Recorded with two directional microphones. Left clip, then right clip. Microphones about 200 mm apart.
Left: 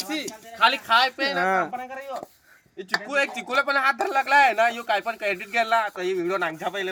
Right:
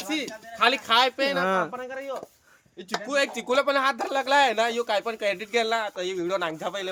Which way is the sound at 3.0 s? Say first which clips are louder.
Right 3 dB; 30° right (ahead or behind).